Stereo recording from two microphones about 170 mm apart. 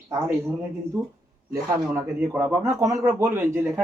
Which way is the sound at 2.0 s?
15° right (ahead or behind).